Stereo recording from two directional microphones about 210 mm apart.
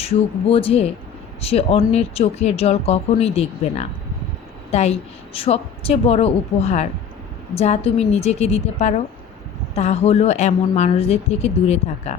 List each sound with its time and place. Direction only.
0.5 s a woman's voice: 30° left (ahead or behind)